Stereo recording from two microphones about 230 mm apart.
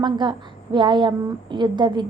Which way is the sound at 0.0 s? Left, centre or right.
Centre.